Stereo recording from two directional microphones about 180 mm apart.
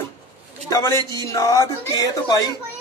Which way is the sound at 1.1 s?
20° left (ahead or behind).